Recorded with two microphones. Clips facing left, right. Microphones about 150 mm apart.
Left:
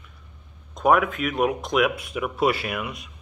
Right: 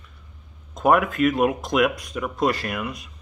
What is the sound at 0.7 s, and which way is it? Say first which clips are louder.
Speech: right 1 dB; centre (ahead or behind).